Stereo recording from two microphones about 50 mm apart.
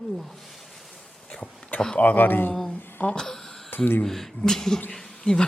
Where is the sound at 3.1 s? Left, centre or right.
Centre.